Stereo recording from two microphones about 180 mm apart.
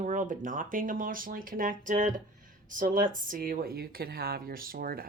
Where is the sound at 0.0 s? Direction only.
45° right (ahead or behind).